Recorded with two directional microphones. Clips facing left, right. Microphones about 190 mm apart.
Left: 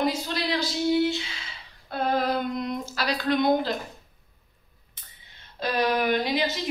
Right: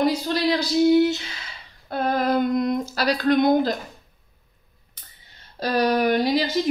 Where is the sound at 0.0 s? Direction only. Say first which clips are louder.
Right 6 dB; 40° right (ahead or behind).